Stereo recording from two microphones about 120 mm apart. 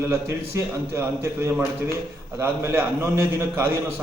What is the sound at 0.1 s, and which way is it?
A man's voice, 20° right (ahead or behind).